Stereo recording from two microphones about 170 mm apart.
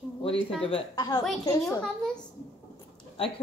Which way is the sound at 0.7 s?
25° left (ahead or behind).